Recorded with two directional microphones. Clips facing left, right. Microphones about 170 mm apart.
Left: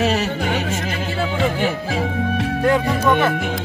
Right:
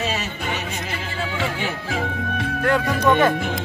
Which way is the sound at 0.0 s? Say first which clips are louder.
Left 7 dB; 65° left (ahead or behind).